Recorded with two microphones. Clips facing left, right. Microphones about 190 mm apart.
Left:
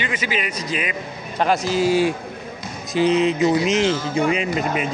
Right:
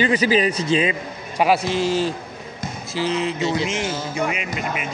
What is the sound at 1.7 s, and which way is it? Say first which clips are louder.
A man's voice: left 3 dB; 10° left (ahead or behind).